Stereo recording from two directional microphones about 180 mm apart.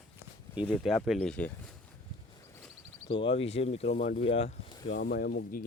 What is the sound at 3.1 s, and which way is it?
Speech, 30° left (ahead or behind).